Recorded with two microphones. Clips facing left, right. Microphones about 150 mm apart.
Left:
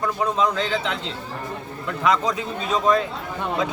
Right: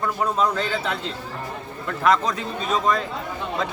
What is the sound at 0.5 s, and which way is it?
A man's voice, 5° right (ahead or behind).